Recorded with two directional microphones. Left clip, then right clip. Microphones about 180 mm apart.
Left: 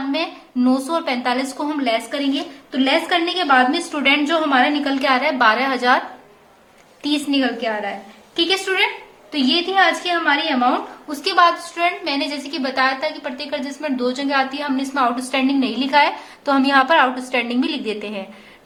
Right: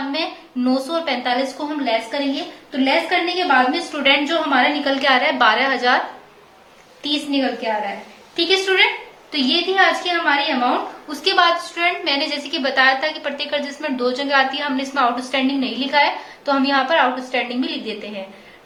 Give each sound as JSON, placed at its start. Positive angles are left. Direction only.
{"t": 0.1, "sound": "a woman's voice", "side_deg": 30}
{"t": 1.6, "sound": "a woman's voice", "side_deg": 40}
{"t": 2.7, "sound": "a woman's voice", "side_deg": 30}
{"t": 7.0, "sound": "a woman's voice", "side_deg": 30}